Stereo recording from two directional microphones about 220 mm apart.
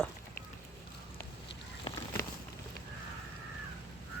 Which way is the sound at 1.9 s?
25° left (ahead or behind).